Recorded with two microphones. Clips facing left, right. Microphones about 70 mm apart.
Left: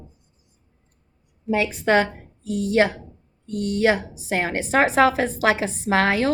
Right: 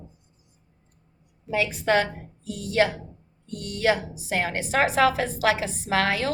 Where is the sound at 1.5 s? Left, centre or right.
Left.